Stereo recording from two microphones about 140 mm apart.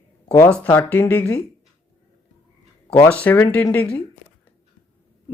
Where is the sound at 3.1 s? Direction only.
10° left (ahead or behind).